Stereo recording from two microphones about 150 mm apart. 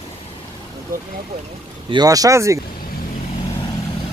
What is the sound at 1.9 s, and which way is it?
Speech, 25° right (ahead or behind).